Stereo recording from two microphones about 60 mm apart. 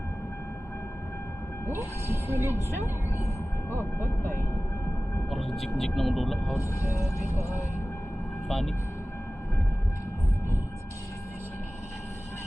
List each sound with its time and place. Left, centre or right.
1.7 s speech: right
3.7 s speech: right
5.3 s speech: centre
8.5 s speech: centre